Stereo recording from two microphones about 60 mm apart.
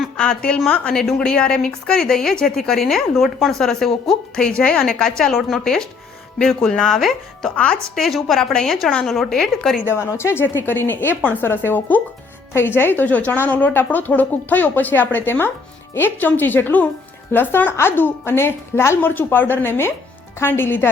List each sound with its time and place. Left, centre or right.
0.2 s a woman's voice: centre
4.4 s a woman's voice: centre
5.3 s a woman's voice: centre
5.6 s a woman's voice: centre
7.5 s a woman's voice: centre
7.9 s a woman's voice: centre
10.2 s a woman's voice: left
11.4 s speech: left